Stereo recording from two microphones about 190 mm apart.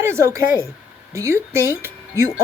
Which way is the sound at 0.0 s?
15° right (ahead or behind).